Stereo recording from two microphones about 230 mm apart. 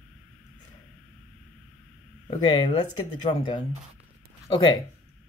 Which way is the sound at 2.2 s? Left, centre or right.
Left.